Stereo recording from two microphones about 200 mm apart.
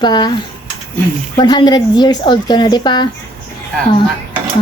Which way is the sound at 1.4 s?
20° left (ahead or behind).